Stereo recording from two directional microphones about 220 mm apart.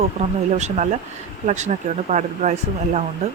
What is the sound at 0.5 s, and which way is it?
Speech, 30° right (ahead or behind).